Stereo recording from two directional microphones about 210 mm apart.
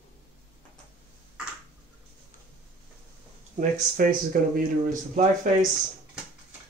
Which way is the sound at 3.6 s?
40° right (ahead or behind).